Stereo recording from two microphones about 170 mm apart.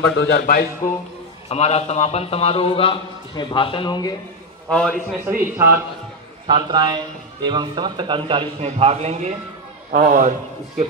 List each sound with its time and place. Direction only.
0.0 s speech: 85° left; by 0.7 s 70° left (ahead or behind)
1.5 s a man's voice: 40° left (ahead or behind)
4.6 s a man's voice: 5° left (ahead or behind)
5.2 s speech: 15° right (ahead or behind)
6.4 s a man's voice: 25° right (ahead or behind)
9.9 s a man's voice: 55° right (ahead or behind)